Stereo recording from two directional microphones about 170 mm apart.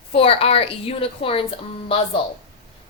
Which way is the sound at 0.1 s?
35° left (ahead or behind).